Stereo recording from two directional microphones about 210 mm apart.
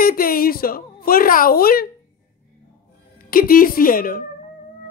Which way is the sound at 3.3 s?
45° left (ahead or behind).